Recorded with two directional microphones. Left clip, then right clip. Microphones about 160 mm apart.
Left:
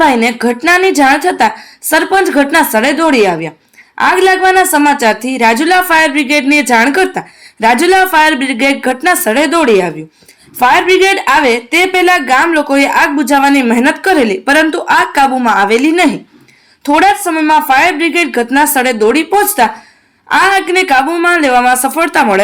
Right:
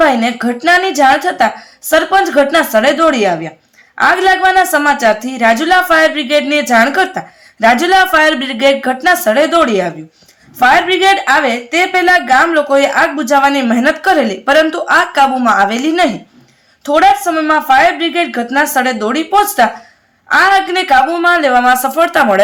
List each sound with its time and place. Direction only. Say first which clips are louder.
0.0 s a woman's voice: left 2 dB; 10° left (ahead or behind)
20.3 s a woman's voice: even; 15° left (ahead or behind)